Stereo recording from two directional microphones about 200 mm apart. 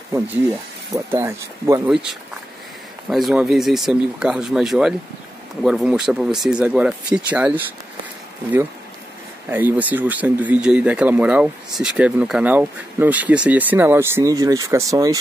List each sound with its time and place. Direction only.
0.9 s speech: 15° right (ahead or behind)
3.1 s speech: centre (ahead or behind)
9.5 s speech: 10° right (ahead or behind)